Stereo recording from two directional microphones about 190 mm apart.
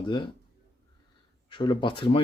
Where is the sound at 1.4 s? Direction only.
25° left (ahead or behind).